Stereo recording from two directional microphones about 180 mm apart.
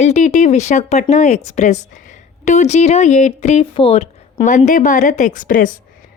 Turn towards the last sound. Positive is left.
turn(degrees=50)  # may be behind; listen again after turning